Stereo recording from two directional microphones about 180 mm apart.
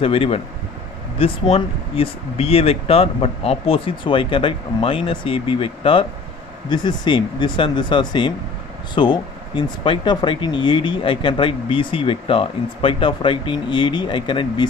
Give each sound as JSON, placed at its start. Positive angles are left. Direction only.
{"t": 0.0, "sound": "speech", "side_deg": 30}